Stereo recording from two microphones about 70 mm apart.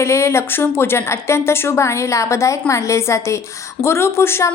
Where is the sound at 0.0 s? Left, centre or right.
Left.